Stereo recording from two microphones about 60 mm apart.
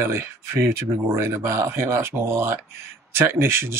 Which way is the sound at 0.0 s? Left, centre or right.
Right.